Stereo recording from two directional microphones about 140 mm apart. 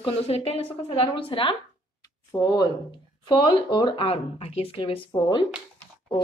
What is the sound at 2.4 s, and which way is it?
Speech, 25° left (ahead or behind).